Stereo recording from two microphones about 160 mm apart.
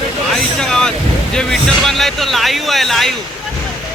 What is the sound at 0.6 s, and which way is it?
Boat, 5° left (ahead or behind).